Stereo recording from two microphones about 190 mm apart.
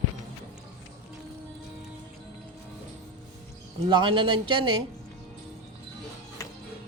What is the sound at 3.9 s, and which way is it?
Speech, 25° right (ahead or behind).